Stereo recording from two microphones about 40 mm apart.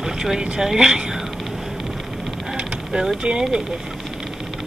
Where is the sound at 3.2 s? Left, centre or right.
Centre.